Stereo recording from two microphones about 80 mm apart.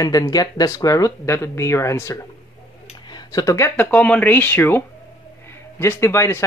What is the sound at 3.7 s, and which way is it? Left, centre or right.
A woman's voice, left.